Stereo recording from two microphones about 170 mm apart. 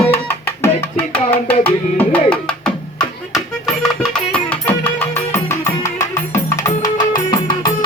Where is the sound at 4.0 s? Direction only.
10° left (ahead or behind).